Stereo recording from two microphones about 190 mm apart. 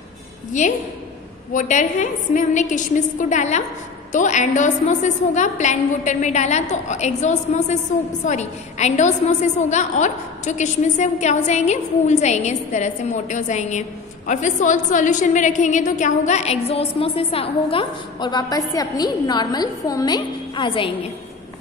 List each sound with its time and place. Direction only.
0.5 s a woman's voice: 40° left (ahead or behind)